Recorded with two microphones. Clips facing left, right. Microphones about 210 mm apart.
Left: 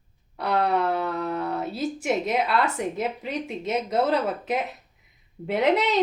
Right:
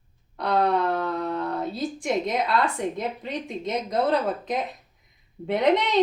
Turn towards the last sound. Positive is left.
turn(degrees=5)  # may be behind; listen again after turning